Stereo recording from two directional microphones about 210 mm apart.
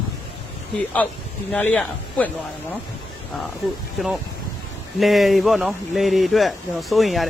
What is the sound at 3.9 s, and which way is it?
Speech, centre (ahead or behind).